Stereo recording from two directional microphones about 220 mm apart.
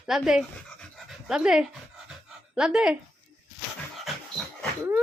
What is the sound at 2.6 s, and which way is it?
Speech, 5° right (ahead or behind).